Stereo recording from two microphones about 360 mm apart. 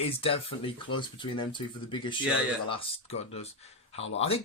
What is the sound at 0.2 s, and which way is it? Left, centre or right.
Speech, centre.